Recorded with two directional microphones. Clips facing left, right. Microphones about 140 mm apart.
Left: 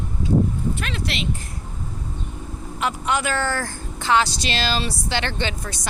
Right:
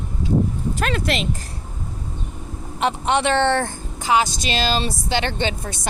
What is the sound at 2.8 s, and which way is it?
Speech, 25° right (ahead or behind).